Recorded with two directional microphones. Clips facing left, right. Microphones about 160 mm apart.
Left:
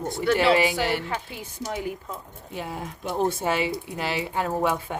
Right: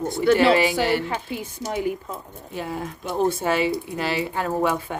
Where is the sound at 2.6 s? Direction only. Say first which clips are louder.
Right 3 dB; 15° left (ahead or behind).